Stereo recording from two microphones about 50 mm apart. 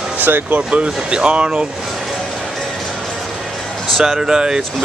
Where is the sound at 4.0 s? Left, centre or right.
Centre.